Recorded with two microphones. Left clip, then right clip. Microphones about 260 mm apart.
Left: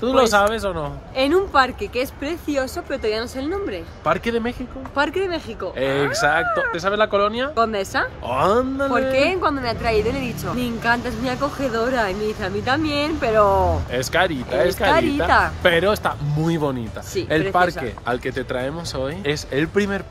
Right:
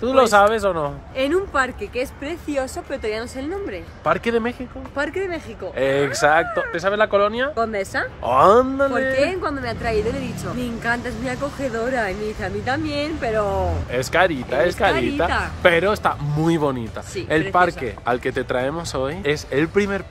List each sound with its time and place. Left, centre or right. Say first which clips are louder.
0.0 s speech: right 2 dB; centre
1.1 s speech: left 4 dB; centre
4.0 s speech: right 1 dB; centre
4.9 s speech: left 3 dB; centre
5.8 s speech: right 1 dB; centre
7.5 s speech: left 2 dB; centre
8.3 s speech: right 7 dB; centre
9.1 s speech: left 2 dB; centre
13.9 s speech: right 5 dB; centre
14.9 s speech: left 3 dB; centre
15.6 s speech: right 1 dB; centre